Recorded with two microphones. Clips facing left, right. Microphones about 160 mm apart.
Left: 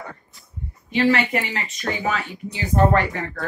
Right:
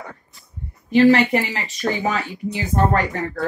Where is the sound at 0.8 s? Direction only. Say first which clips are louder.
Right 6 dB; 40° right (ahead or behind).